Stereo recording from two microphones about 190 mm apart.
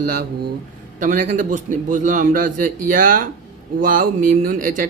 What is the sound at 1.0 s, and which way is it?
Speech, 40° right (ahead or behind).